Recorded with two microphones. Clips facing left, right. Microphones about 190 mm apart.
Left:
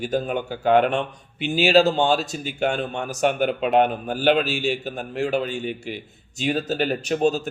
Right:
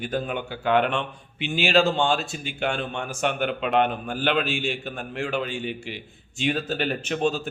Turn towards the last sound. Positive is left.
turn(degrees=40)  # may be behind; listen again after turning